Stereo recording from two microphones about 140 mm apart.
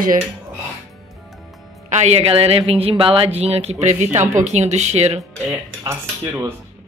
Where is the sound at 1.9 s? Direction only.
50° right (ahead or behind).